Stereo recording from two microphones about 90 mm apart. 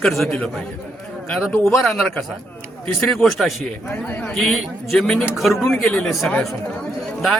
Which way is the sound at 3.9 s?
20° left (ahead or behind).